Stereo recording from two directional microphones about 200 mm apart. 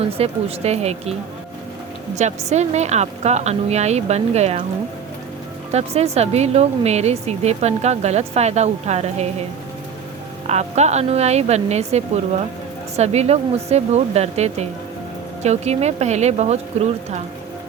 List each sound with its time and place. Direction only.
0.0 s speech: 30° right (ahead or behind)
2.5 s speech: 35° right (ahead or behind)
5.7 s speech: 30° right (ahead or behind)
10.4 s speech: 35° right (ahead or behind)